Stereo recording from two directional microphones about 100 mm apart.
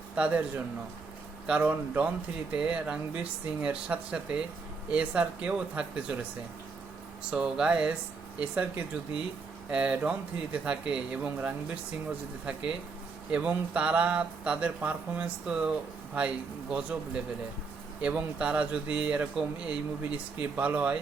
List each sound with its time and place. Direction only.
0.2 s speech: 15° right (ahead or behind)
7.3 s speech: 5° right (ahead or behind)
18.0 s speech: 10° right (ahead or behind)